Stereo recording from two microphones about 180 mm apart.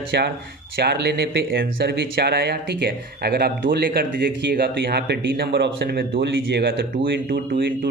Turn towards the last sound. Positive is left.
turn(degrees=-75)  # may be behind; listen again after turning